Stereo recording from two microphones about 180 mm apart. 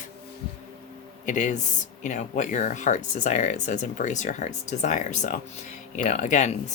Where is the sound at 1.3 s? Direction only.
40° left (ahead or behind).